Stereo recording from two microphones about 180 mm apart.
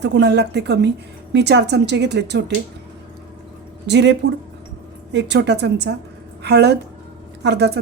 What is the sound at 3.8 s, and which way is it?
A woman's voice, 70° right (ahead or behind).